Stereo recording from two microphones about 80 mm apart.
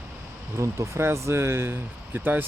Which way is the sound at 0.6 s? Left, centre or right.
Right.